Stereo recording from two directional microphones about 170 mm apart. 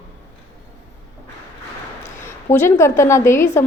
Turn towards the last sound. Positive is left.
turn(degrees=15)  # may be behind; listen again after turning